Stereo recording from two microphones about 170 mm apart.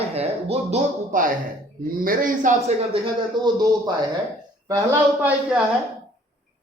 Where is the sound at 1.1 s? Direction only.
50° right (ahead or behind).